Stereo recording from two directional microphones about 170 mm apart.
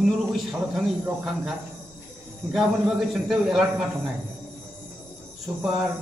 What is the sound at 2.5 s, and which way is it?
Speech, centre (ahead or behind).